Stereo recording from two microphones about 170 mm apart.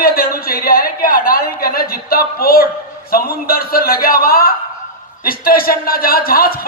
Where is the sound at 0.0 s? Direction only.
60° left (ahead or behind).